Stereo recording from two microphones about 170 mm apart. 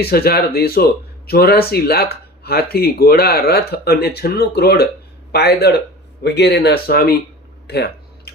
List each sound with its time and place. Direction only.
0.0 s speech: 65° left (ahead or behind)
6.2 s speech: 80° left; by 7.2 s 60° left (ahead or behind)
7.7 s a sound: 75° left (ahead or behind)